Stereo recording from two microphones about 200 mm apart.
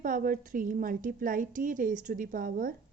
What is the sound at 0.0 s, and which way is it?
Speech, 45° right (ahead or behind).